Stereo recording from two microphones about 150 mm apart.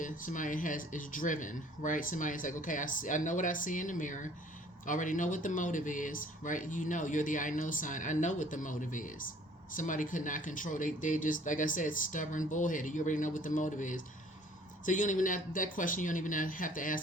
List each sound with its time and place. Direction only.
0.0 s speech: 60° left (ahead or behind)